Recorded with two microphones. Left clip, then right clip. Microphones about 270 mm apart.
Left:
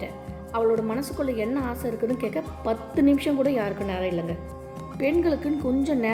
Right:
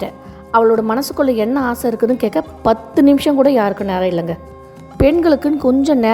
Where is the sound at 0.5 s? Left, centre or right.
Right.